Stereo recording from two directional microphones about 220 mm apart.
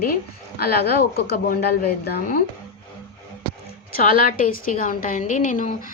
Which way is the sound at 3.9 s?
40° left (ahead or behind).